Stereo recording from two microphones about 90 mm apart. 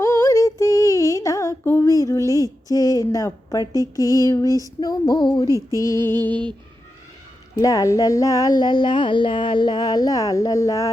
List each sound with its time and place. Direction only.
0.0 s female singing: 30° left (ahead or behind)
1.6 s female singing: 25° left (ahead or behind)
1.9 s a woman's voice: 40° left (ahead or behind)
5.7 s a woman's voice: 40° left (ahead or behind)
7.5 s speech: 40° left (ahead or behind)